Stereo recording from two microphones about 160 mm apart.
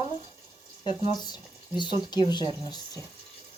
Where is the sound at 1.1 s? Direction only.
25° left (ahead or behind).